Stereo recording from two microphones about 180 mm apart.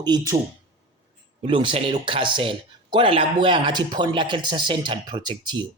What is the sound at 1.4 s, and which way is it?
Speech, 30° right (ahead or behind).